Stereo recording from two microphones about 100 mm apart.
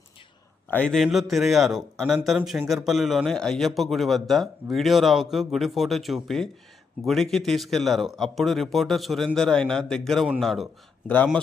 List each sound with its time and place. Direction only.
0.9 s a man's voice: centre (ahead or behind)